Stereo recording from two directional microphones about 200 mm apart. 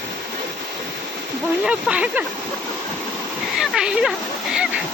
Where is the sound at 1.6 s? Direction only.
5° right (ahead or behind).